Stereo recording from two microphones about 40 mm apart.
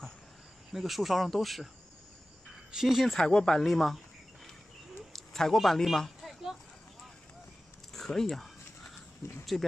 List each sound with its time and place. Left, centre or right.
0.7 s speech: centre
2.7 s speech: centre
3.2 s speech: centre
3.6 s speech: centre
5.1 s a man's voice: centre
8.1 s speech: centre
9.5 s speech: centre